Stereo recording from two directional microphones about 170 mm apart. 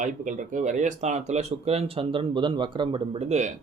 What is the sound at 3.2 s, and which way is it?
Speech, 40° right (ahead or behind).